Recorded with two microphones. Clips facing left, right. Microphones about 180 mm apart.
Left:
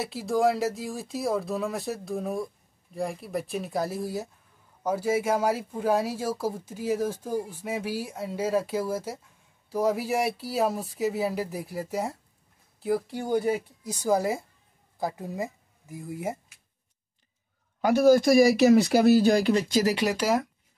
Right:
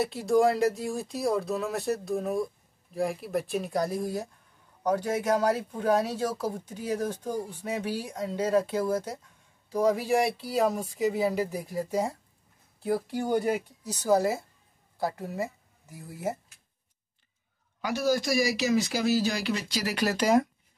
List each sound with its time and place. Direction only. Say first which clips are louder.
0.0 s speech: right 2 dB; centre (ahead or behind)
14.0 s speech: right 1 dB; 15° left (ahead or behind)
17.8 s speech: left 8 dB; 50° left (ahead or behind)
20.2 s speech: right 2 dB; 5° left (ahead or behind)